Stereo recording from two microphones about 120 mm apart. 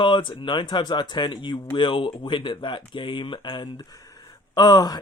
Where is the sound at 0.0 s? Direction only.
40° left (ahead or behind).